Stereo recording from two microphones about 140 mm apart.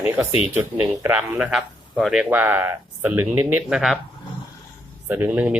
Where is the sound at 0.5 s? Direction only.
10° right (ahead or behind).